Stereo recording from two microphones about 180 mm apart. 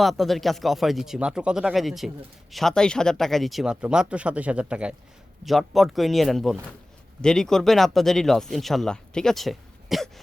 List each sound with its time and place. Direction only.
0.0 s speech: centre (ahead or behind)